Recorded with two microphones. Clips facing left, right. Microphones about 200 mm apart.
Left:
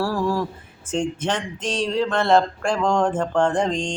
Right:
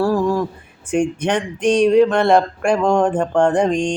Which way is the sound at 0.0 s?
20° right (ahead or behind).